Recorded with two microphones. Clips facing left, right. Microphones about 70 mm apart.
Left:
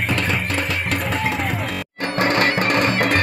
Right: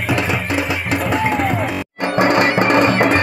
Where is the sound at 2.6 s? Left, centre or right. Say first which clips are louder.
Right 5 dB; right.